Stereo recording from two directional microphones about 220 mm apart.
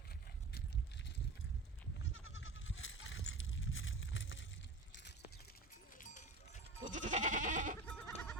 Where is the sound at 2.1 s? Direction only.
60° left (ahead or behind).